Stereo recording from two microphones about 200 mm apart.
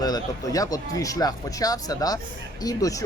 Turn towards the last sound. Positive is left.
turn(degrees=15)  # may be behind; listen again after turning